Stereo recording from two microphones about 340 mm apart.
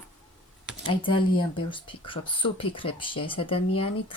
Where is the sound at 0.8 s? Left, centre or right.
Centre.